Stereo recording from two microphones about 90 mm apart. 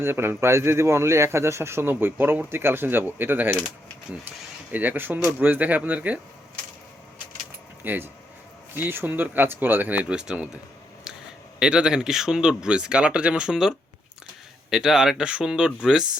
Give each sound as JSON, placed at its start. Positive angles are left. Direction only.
{"t": 0.0, "sound": "speech", "side_deg": -25}
{"t": 4.7, "sound": "speech", "side_deg": -20}
{"t": 7.9, "sound": "speech", "side_deg": -25}
{"t": 11.1, "sound": "a sound", "side_deg": -5}
{"t": 11.6, "sound": "speech", "side_deg": -10}